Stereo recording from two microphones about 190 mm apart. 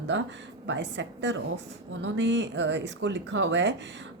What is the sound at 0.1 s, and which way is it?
Speech, 70° right (ahead or behind).